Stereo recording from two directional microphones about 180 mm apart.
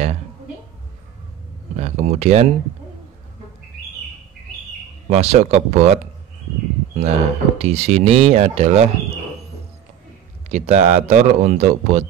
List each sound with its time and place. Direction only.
1.8 s speech: 35° right (ahead or behind)
5.1 s speech: 35° right (ahead or behind)
7.0 s speech: 35° right (ahead or behind)
10.5 s speech: 35° right (ahead or behind)